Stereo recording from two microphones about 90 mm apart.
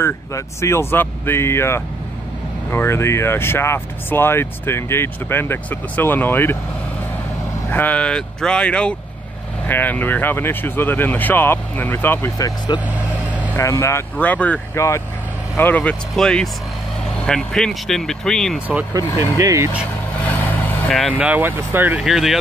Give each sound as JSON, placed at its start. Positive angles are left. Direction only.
{"t": 0.0, "sound": "speech", "side_deg": 30}
{"t": 7.7, "sound": "speech", "side_deg": 15}
{"t": 9.7, "sound": "speech", "side_deg": 20}
{"t": 13.6, "sound": "speech", "side_deg": 35}
{"t": 14.1, "sound": "speech", "side_deg": 20}
{"t": 18.9, "sound": "speech", "side_deg": -35}
{"t": 21.1, "sound": "speech", "side_deg": -15}
{"t": 22.0, "sound": "speech", "side_deg": -5}